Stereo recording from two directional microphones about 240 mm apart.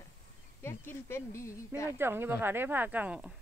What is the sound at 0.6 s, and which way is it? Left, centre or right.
Speech, centre.